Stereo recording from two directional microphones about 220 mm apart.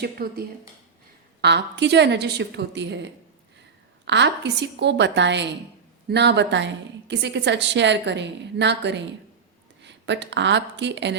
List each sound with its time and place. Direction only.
0.0 s a woman's voice: 45° right (ahead or behind)